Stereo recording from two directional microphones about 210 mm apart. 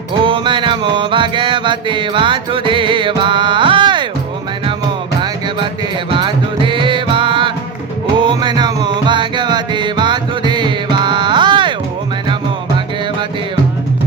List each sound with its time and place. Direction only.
0.2 s music: 25° right (ahead or behind)
6.1 s music: 25° right (ahead or behind)